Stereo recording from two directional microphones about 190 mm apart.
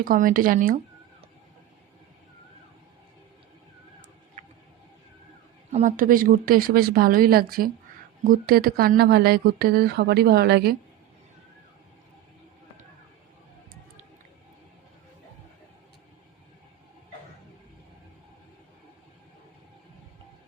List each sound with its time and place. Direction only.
0.0 s speech: 45° right (ahead or behind)
4.4 s a sound: 40° right (ahead or behind)
5.7 s speech: 45° right (ahead or behind)